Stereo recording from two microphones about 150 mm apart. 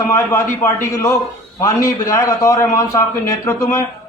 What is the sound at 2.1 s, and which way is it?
A man's voice, 20° left (ahead or behind).